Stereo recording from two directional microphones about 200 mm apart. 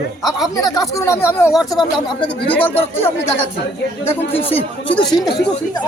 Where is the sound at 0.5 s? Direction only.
20° left (ahead or behind).